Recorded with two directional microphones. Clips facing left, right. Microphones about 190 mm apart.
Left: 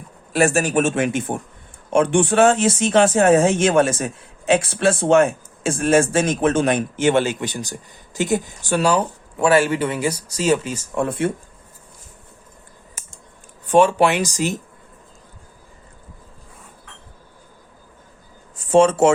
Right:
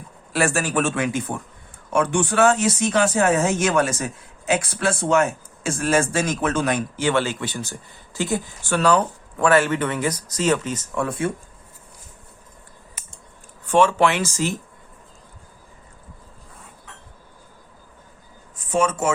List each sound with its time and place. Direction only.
0.3 s speech: 20° left (ahead or behind)
10.9 s speech: 25° left (ahead or behind)
13.7 s speech: 15° left (ahead or behind)
18.7 s speech: 30° left (ahead or behind)